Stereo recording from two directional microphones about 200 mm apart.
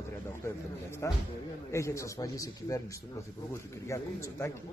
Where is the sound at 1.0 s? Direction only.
15° left (ahead or behind).